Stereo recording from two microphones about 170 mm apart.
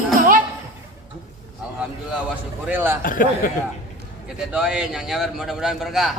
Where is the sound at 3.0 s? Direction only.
55° left (ahead or behind).